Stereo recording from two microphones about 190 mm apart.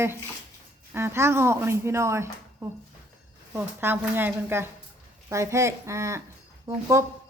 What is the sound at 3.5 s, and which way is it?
Speech, 10° right (ahead or behind).